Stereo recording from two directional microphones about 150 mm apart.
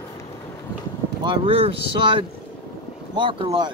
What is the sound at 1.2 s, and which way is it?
Speech, 40° right (ahead or behind).